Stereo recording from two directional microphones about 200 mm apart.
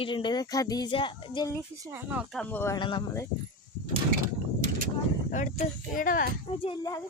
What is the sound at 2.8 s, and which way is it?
Speech, 20° left (ahead or behind).